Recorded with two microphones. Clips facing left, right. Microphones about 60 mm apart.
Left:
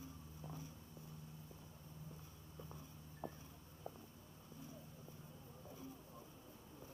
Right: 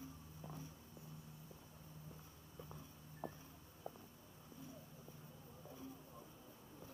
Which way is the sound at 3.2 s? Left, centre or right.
Right.